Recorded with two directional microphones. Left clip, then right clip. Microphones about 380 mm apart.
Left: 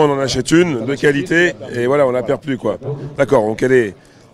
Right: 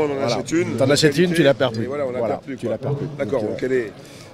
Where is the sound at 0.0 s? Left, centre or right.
Left.